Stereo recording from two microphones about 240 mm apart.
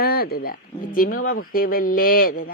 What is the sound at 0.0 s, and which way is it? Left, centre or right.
Speech, left.